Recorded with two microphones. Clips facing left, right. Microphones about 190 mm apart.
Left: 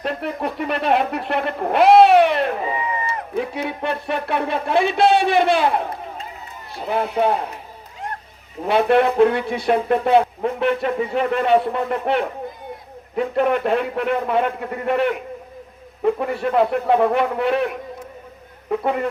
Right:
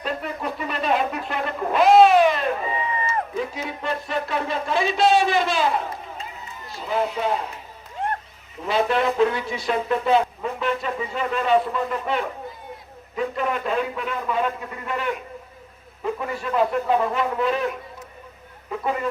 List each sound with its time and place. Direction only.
0.0 s a sound: 65° left (ahead or behind)
6.7 s speech: 60° left (ahead or behind)
8.6 s speech: 60° left (ahead or behind)
18.7 s speech: 65° left (ahead or behind)